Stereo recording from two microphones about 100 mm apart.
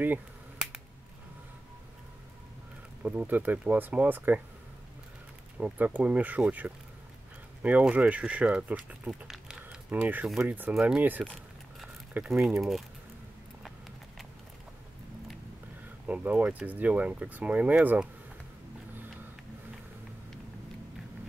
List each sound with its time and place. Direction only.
3.0 s speech: 15° right (ahead or behind)
5.6 s speech: 15° right (ahead or behind)
10.5 s speech: 20° right (ahead or behind)
10.8 s speech: 5° right (ahead or behind)
12.3 s speech: 5° right (ahead or behind)
16.1 s speech: 15° right (ahead or behind)